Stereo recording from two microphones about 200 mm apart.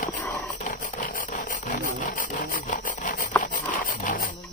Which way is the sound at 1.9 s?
40° left (ahead or behind).